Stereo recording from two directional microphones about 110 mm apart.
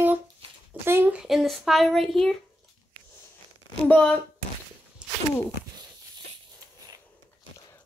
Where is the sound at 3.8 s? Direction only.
10° left (ahead or behind).